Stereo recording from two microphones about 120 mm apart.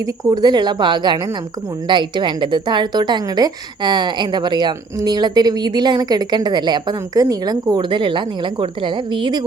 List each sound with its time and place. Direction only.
0.3 s a woman's voice: 35° right (ahead or behind)